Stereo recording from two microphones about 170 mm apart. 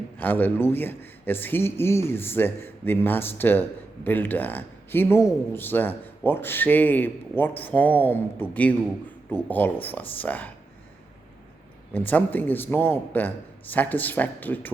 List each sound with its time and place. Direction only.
0.2 s a man's voice: 10° left (ahead or behind)
11.9 s a man's voice: 10° left (ahead or behind)